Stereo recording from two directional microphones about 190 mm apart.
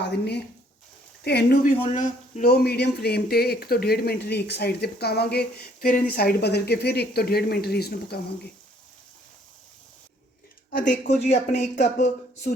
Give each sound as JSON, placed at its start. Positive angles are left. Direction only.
{"t": 0.0, "sound": "speech", "side_deg": 60}
{"t": 1.8, "sound": "speech", "side_deg": 35}
{"t": 2.4, "sound": "speech", "side_deg": 55}
{"t": 10.7, "sound": "speech", "side_deg": 50}